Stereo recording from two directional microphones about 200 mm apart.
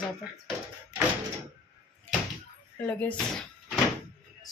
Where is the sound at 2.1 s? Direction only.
5° left (ahead or behind).